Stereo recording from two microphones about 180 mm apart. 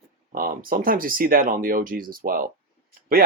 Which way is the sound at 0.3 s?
50° right (ahead or behind).